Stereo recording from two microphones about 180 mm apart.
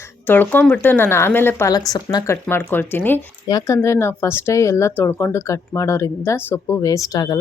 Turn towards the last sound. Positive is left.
turn(degrees=20)  # may be behind; listen again after turning